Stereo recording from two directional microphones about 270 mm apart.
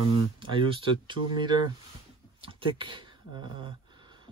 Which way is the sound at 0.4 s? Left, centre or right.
Centre.